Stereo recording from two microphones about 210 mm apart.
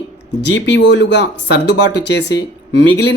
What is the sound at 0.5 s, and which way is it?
Speech, 60° left (ahead or behind).